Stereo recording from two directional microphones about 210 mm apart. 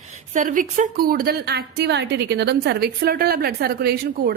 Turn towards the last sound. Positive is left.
turn(degrees=-50)  # may be behind; listen again after turning